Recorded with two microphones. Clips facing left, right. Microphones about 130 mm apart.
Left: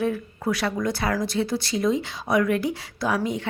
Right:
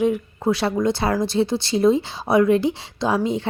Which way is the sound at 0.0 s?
20° right (ahead or behind).